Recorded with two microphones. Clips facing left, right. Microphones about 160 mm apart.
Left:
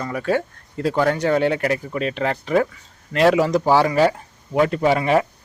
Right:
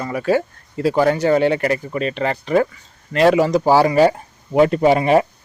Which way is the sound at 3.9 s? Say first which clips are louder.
Right 3 dB; 35° right (ahead or behind).